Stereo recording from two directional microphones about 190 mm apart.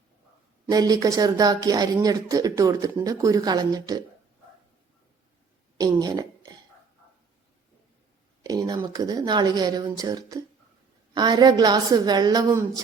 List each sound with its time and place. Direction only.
0.7 s speech: 20° right (ahead or behind)
5.7 s a sound: 20° right (ahead or behind)
8.4 s speech: 20° right (ahead or behind)